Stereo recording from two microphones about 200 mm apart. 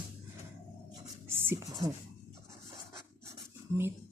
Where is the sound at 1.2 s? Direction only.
10° right (ahead or behind).